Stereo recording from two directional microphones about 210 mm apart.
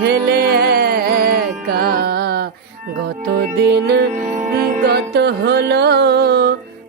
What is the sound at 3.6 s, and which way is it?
Music, 50° right (ahead or behind).